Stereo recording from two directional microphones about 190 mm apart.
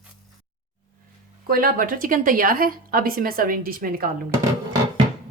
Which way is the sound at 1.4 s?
50° right (ahead or behind).